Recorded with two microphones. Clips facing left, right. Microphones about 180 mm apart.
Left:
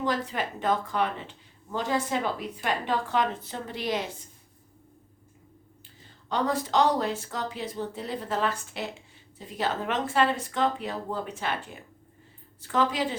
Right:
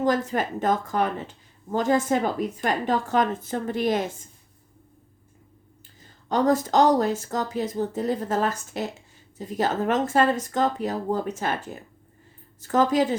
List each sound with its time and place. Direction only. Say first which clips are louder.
0.0 s speech: right 6 dB; 45° right (ahead or behind)
6.0 s speech: right 5 dB; 45° right (ahead or behind)